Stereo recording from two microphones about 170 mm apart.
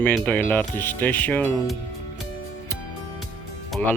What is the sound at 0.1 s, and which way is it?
Speech, 10° left (ahead or behind).